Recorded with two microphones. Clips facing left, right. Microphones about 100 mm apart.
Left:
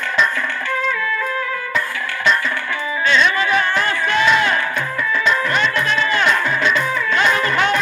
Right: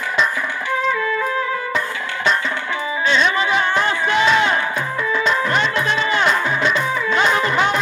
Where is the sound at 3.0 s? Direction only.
25° right (ahead or behind).